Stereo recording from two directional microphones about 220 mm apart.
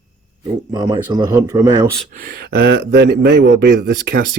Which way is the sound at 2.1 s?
40° right (ahead or behind).